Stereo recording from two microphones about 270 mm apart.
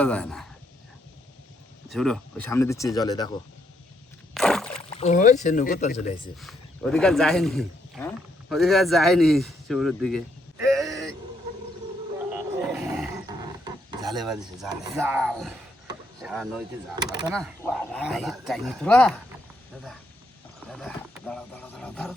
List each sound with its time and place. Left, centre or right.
0.0 s speech: centre
1.9 s speech: centre
4.4 s a sound: centre
4.9 s speech: left
6.4 s speech: centre
10.8 s a sound: centre
12.6 s roaring cats: centre
13.9 s a sound: centre
14.2 s speech: centre
16.9 s speech: centre
17.2 s speech: centre
20.7 s speech: centre